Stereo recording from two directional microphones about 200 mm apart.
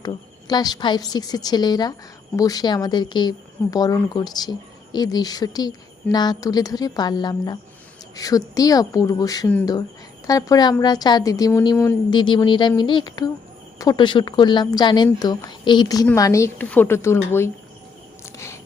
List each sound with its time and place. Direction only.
0.0 s a woman's voice: 20° left (ahead or behind)
18.3 s cricket: 15° left (ahead or behind)